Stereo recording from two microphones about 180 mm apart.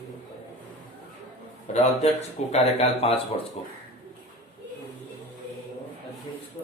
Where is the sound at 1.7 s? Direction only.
35° left (ahead or behind).